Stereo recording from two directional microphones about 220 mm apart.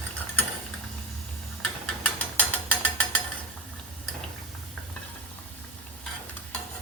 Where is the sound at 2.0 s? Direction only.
5° left (ahead or behind).